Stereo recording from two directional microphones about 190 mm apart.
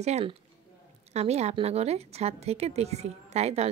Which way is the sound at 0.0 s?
30° right (ahead or behind).